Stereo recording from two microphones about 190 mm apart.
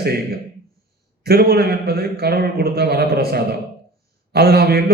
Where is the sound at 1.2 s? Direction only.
55° right (ahead or behind).